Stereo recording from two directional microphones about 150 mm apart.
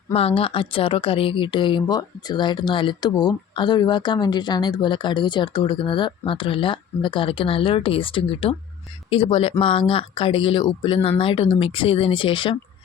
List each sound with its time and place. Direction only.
0.1 s speech: 40° left (ahead or behind)